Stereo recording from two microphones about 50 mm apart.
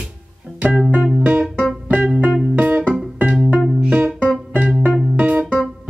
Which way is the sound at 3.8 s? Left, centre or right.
Right.